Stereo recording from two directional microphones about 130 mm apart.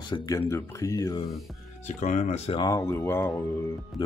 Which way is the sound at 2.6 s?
25° left (ahead or behind).